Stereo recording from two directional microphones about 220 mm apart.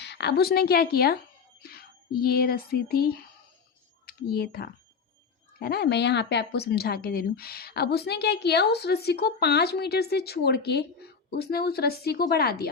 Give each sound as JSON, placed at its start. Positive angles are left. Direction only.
{"t": 0.0, "sound": "speech", "side_deg": 50}